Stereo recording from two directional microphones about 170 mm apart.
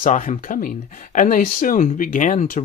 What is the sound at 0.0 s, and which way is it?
Speech, 50° left (ahead or behind).